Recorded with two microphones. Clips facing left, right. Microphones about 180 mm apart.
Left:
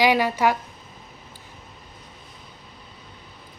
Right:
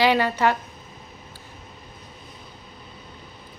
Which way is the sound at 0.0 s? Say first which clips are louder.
Even; 10° left (ahead or behind).